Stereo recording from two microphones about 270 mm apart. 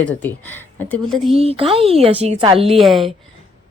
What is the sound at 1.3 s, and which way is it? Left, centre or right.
A woman's voice, right.